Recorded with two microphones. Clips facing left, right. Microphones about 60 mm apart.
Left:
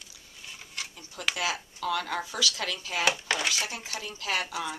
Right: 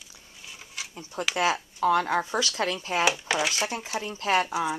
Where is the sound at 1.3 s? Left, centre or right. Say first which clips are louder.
Right 6 dB; right.